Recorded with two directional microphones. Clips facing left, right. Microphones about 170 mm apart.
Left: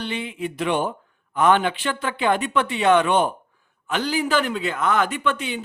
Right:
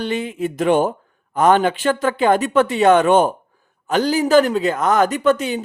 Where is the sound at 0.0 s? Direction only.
45° right (ahead or behind).